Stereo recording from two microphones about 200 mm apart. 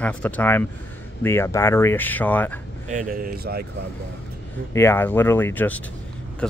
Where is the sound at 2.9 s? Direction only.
40° right (ahead or behind).